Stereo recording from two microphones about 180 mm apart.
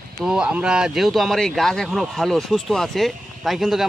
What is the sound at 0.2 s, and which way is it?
Speech, 5° right (ahead or behind).